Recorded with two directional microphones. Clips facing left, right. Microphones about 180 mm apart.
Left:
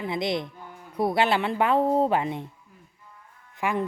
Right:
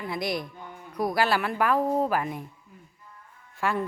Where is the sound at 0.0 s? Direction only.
25° left (ahead or behind).